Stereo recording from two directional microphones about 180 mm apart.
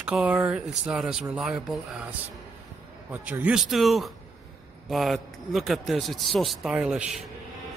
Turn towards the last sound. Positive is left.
turn(degrees=-5)  # may be behind; listen again after turning